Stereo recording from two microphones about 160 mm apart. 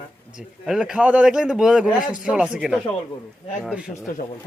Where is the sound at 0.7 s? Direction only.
5° right (ahead or behind).